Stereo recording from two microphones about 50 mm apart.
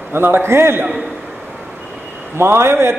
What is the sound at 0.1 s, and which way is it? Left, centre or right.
Speech, right.